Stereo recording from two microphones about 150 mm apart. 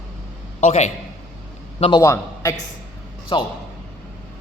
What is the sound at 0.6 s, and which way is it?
A man's voice, 45° left (ahead or behind).